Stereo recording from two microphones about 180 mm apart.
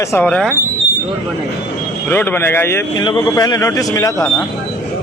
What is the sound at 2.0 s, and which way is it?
Speech, 10° left (ahead or behind).